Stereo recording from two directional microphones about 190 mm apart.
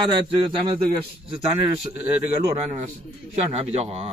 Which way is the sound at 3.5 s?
35° right (ahead or behind).